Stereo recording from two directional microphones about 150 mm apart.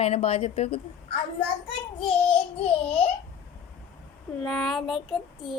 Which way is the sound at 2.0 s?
35° left (ahead or behind).